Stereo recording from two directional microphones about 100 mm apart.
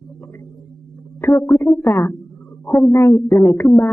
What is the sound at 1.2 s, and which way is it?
A man's voice, 25° left (ahead or behind).